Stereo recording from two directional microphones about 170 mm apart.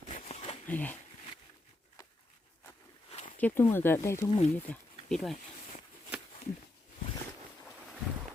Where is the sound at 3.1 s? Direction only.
40° left (ahead or behind).